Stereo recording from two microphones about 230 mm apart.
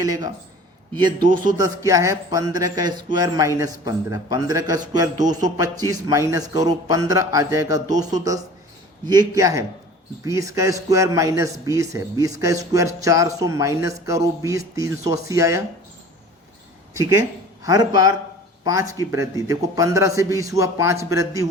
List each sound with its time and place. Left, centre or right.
0.0 s speech: centre
1.2 s a man's voice: right
1.6 s speech: centre
9.0 s speech: centre
16.9 s speech: centre